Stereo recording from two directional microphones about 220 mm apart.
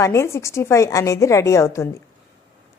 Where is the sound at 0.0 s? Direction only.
15° left (ahead or behind).